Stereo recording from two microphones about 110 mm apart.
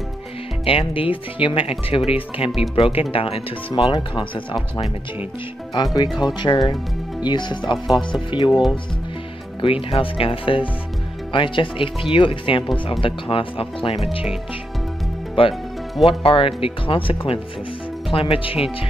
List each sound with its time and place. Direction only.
0.7 s speech: 55° left (ahead or behind)
9.6 s speech: 55° left (ahead or behind)
15.4 s speech: 55° left (ahead or behind)